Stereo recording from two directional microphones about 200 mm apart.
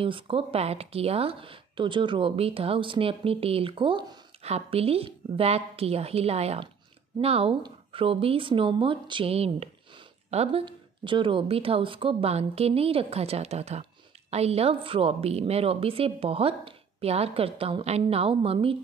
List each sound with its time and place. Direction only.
0.0 s speech: 25° right (ahead or behind)